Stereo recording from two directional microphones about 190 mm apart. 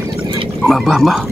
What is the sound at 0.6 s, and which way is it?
Speech, centre (ahead or behind).